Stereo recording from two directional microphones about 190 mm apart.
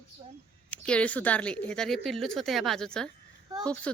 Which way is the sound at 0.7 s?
5° left (ahead or behind).